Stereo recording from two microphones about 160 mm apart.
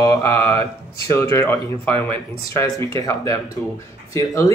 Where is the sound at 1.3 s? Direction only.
15° left (ahead or behind).